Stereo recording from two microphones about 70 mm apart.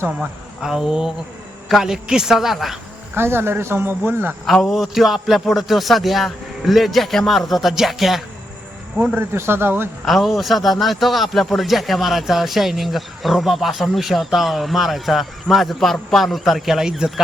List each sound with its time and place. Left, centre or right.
0.2 s speech: centre
3.2 s speech: right
4.6 s speech: centre
9.1 s speech: right
10.1 s speech: centre